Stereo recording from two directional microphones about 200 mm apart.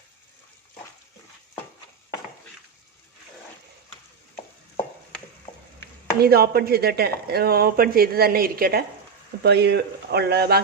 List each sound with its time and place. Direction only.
6.2 s speech: 50° right (ahead or behind)